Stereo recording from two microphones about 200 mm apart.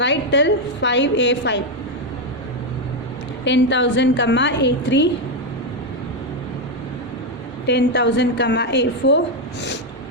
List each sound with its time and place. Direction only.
0.0 s a woman's voice: 65° left (ahead or behind)
3.4 s a woman's voice: 65° left (ahead or behind)
7.7 s a woman's voice: 60° left (ahead or behind)